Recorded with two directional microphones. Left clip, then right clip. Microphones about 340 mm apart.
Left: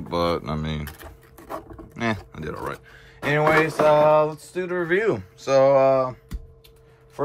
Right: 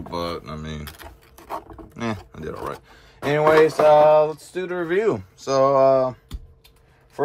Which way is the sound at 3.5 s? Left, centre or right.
Centre.